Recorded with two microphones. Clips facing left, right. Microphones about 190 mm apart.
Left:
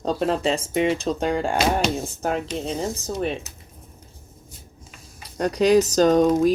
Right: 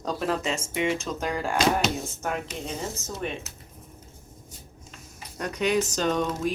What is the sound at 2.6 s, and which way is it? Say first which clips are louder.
Speech: left 6 dB; 35° left (ahead or behind).